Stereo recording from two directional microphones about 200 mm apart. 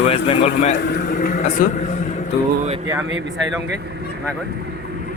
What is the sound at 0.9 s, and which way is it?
A man's voice, 45° left (ahead or behind).